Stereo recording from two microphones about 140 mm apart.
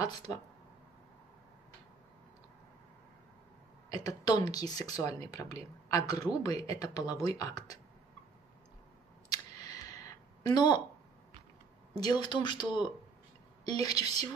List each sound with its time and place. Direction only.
0.0 s speech: 25° left (ahead or behind)
3.9 s speech: 25° left (ahead or behind)
9.3 s a sound: 25° left (ahead or behind)
12.0 s speech: 30° left (ahead or behind)